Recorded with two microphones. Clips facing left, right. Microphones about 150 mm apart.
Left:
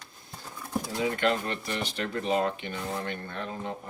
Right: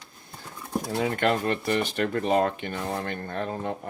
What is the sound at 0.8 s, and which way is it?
Speech, 55° right (ahead or behind).